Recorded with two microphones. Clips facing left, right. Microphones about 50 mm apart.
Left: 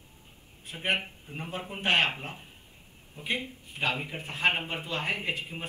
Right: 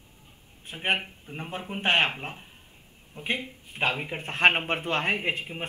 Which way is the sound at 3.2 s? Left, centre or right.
Right.